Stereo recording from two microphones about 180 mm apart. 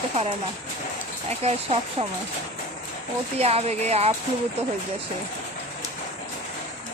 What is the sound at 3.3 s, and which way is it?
Speech, 35° right (ahead or behind).